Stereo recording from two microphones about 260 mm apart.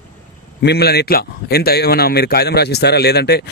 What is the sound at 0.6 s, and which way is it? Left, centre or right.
Speech, left.